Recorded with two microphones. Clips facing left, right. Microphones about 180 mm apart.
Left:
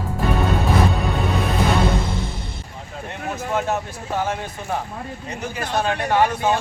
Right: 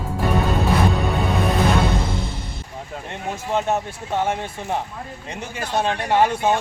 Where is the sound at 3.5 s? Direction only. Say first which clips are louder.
Right 1 dB; 25° right (ahead or behind).